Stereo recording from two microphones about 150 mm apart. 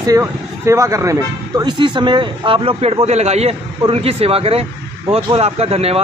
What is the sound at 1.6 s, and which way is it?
A man's voice, 30° right (ahead or behind).